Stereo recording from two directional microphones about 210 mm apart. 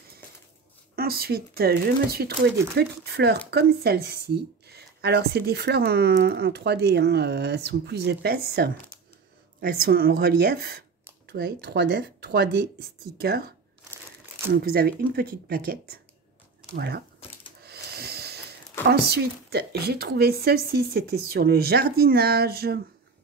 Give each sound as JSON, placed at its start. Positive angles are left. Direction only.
{"t": 0.9, "sound": "speech", "side_deg": -45}
{"t": 14.5, "sound": "speech", "side_deg": -45}
{"t": 17.6, "sound": "owl", "side_deg": -50}
{"t": 18.9, "sound": "speech", "side_deg": -50}